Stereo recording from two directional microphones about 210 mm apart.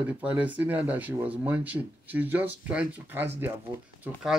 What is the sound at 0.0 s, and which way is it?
Speech, 5° right (ahead or behind).